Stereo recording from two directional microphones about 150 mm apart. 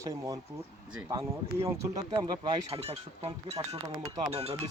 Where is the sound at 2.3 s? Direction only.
30° right (ahead or behind).